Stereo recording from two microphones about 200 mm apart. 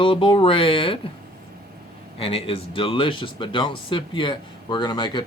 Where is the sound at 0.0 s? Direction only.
25° left (ahead or behind).